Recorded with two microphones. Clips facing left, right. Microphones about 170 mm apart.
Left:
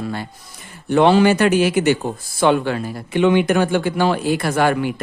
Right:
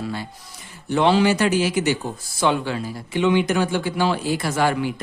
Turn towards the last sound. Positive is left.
turn(degrees=60)  # may be behind; listen again after turning